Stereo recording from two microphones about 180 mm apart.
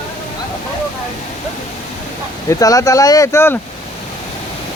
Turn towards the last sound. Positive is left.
turn(degrees=15)  # may be behind; listen again after turning